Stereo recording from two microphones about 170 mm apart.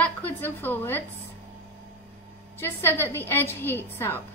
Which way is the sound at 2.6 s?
15° left (ahead or behind).